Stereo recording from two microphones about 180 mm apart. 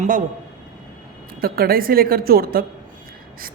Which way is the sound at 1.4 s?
55° right (ahead or behind).